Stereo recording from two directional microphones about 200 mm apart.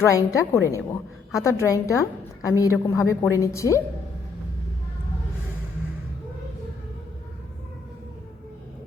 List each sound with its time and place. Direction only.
0.0 s a woman's voice: 15° left (ahead or behind)